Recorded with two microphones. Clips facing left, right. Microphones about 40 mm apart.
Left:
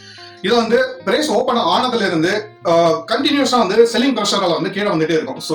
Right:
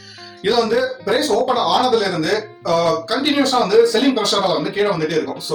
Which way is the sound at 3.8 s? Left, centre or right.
Left.